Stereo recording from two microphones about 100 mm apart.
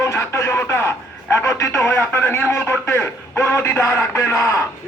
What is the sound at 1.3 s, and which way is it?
Speech, 25° left (ahead or behind).